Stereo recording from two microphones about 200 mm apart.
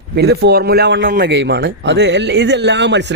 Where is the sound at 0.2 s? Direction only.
55° right (ahead or behind).